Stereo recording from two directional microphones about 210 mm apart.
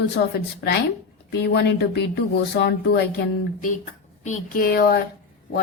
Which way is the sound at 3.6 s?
40° left (ahead or behind).